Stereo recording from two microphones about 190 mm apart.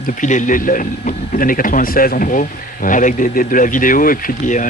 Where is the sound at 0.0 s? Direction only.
40° left (ahead or behind).